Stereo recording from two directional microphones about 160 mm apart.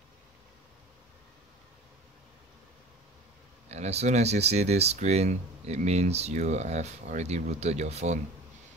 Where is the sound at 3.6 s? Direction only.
40° right (ahead or behind).